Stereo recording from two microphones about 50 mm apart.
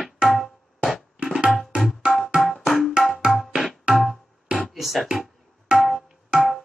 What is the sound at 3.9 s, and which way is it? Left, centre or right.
Music, centre.